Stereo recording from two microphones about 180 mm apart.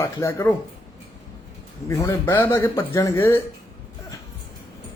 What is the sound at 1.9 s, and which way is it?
Speech, 15° left (ahead or behind).